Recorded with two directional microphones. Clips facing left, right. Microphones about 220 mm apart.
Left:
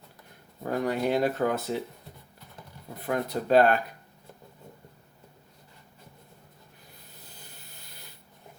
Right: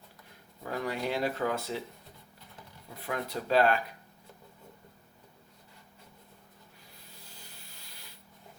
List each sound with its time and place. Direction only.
0.6 s speech: 50° left (ahead or behind)
2.9 s speech: 45° left (ahead or behind)
7.3 s rub: 50° left (ahead or behind)